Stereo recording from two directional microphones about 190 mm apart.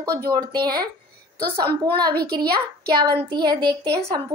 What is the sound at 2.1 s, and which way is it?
Speech, 55° right (ahead or behind).